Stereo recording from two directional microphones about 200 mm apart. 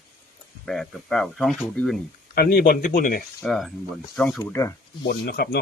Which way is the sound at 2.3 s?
50° left (ahead or behind).